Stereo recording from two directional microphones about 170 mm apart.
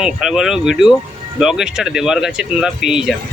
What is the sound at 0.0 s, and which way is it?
Speech, 5° right (ahead or behind).